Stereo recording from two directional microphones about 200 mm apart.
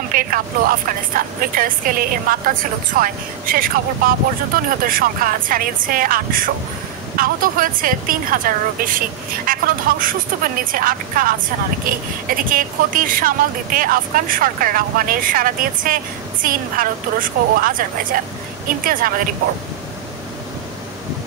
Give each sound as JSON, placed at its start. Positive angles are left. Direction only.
{"t": 0.1, "sound": "speech", "side_deg": -45}